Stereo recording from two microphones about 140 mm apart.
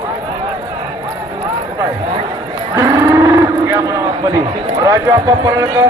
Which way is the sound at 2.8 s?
20° right (ahead or behind).